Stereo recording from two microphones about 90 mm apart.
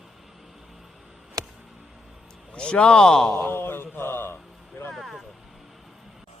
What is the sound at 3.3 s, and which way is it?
Mantra, 25° left (ahead or behind).